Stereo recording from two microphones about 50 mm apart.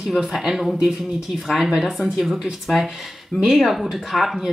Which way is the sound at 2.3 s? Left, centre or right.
Centre.